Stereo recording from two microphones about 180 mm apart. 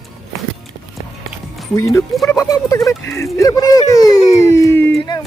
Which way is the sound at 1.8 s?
15° left (ahead or behind).